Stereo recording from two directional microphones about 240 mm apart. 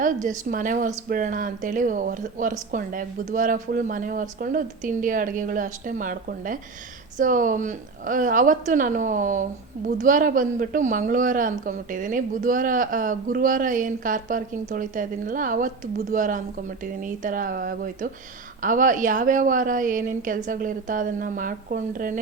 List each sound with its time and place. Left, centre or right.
0.0 s a woman's voice: right